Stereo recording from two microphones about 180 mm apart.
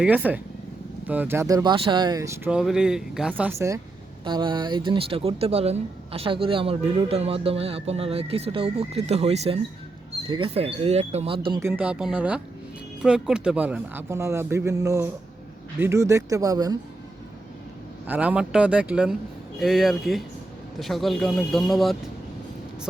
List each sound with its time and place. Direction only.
0.0 s speech: 10° right (ahead or behind)
4.2 s speech: 25° right (ahead or behind)
11.6 s speech: 10° right (ahead or behind)
18.0 s speech: 10° right (ahead or behind)